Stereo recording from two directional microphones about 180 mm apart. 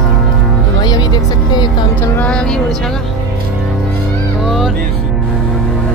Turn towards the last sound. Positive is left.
turn(degrees=0)  # may be behind; listen again after turning